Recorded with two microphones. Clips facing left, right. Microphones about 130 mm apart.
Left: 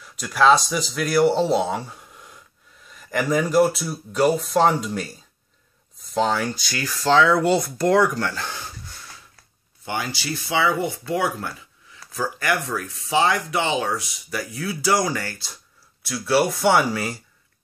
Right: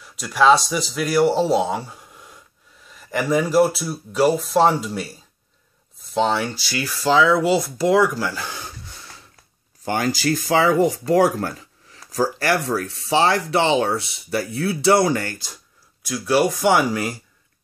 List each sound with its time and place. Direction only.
0.2 s speech: 5° right (ahead or behind)
9.8 s speech: 45° right (ahead or behind); by 17.1 s 15° right (ahead or behind)